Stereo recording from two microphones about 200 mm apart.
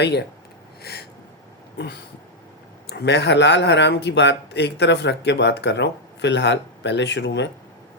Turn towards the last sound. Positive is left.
turn(degrees=60)  # may be behind; listen again after turning